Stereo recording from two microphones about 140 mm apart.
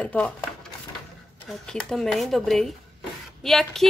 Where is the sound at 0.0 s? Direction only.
10° left (ahead or behind).